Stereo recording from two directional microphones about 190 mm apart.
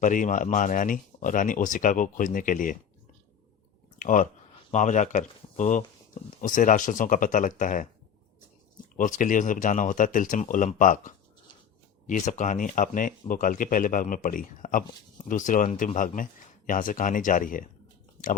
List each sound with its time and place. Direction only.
0.0 s speech: 45° left (ahead or behind)
3.9 s speech: 40° left (ahead or behind)
9.0 s speech: 45° left (ahead or behind)